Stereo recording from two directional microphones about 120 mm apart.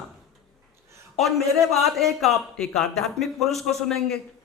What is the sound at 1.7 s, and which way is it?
Speech, centre (ahead or behind).